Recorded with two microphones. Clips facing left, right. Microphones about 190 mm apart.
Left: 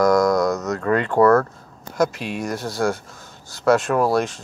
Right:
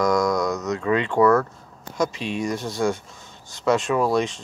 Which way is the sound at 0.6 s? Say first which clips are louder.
Left 1 dB; 15° right (ahead or behind).